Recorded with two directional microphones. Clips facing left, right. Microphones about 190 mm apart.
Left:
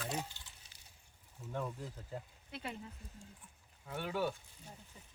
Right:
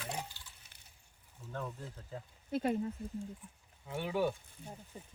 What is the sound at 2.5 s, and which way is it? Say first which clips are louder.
Speech: right 12 dB; 45° right (ahead or behind).